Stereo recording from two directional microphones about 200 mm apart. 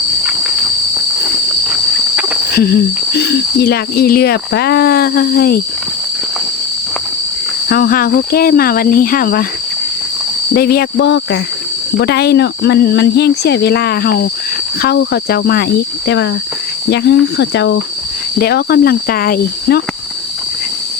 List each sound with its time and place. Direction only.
1.6 s walk: 5° right (ahead or behind)
2.6 s speech: 50° left (ahead or behind)
7.7 s speech: 45° left (ahead or behind)
10.5 s speech: 50° left (ahead or behind)
10.9 s speech: 60° left (ahead or behind)
18.3 s speech: 50° left (ahead or behind)